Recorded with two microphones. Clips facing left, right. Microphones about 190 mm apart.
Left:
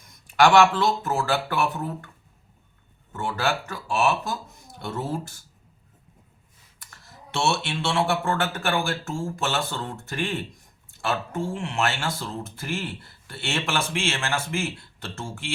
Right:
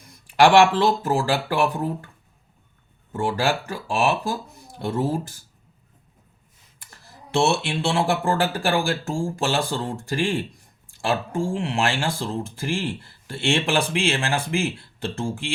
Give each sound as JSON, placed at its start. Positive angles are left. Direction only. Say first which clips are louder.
{"t": 0.1, "sound": "a sound", "louder": "right 2 dB", "side_deg": -35}
{"t": 0.8, "sound": "speech", "louder": "right 4 dB", "side_deg": -35}
{"t": 3.1, "sound": "speech", "louder": "right 4 dB", "side_deg": -35}
{"t": 6.9, "sound": "speech", "louder": "right 7 dB", "side_deg": -30}